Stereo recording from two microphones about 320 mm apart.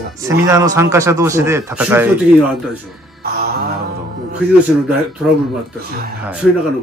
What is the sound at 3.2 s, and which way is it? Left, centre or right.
Music, right.